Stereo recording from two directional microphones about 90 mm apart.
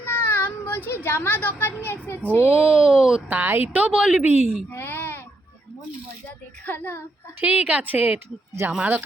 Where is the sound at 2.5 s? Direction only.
15° right (ahead or behind).